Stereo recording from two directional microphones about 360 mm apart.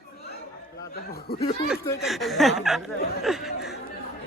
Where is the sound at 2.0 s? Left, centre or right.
Centre.